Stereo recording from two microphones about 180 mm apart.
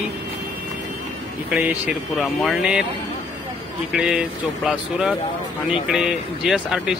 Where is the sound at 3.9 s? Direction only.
5° right (ahead or behind).